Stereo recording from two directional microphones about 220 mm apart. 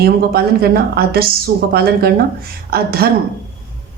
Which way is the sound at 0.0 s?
45° right (ahead or behind).